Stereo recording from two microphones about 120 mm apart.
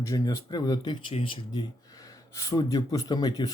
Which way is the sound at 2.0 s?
30° left (ahead or behind).